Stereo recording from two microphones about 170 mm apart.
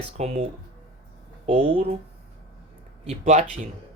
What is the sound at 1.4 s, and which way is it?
Speech, 35° right (ahead or behind).